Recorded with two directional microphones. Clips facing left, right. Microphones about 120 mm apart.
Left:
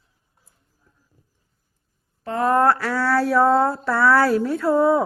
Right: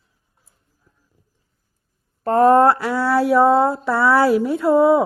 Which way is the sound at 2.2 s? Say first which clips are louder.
Right 8 dB; 45° right (ahead or behind).